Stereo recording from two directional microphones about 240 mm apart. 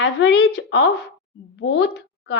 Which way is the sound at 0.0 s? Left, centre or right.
Left.